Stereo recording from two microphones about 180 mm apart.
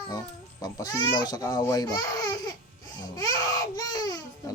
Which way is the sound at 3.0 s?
20° left (ahead or behind).